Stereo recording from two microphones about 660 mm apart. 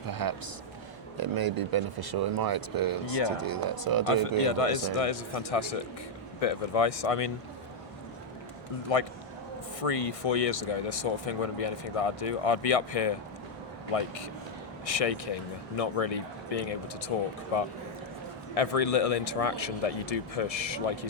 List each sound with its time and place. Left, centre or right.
0.1 s a sound: right
1.1 s speech: right
4.1 s speech: left
8.9 s speech: left
14.8 s speech: left